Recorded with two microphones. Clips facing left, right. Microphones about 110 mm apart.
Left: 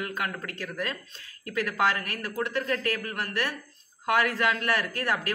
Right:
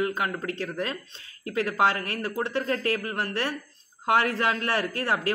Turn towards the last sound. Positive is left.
turn(degrees=-30)  # may be behind; listen again after turning